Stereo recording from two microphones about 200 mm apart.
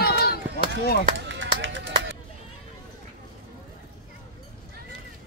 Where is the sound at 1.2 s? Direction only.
65° right (ahead or behind).